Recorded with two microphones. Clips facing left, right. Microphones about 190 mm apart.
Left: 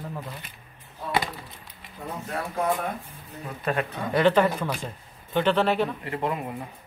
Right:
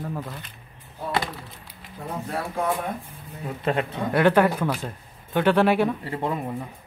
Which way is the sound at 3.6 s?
25° right (ahead or behind).